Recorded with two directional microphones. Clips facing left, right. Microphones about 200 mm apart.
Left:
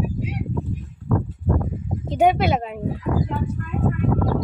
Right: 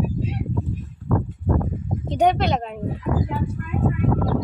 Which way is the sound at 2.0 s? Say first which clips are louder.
Left 1 dB; 5° left (ahead or behind).